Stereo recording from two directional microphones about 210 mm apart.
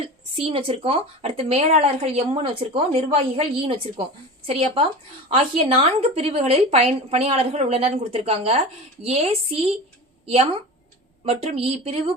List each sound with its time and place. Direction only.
0.0 s a woman's voice: 25° right (ahead or behind)